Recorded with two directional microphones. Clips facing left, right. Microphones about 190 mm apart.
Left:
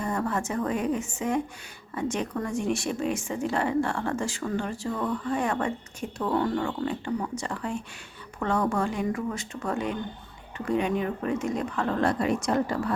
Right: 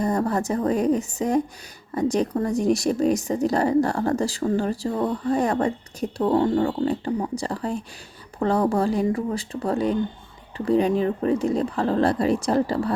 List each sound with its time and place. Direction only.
0.0 s a woman's voice: 35° right (ahead or behind)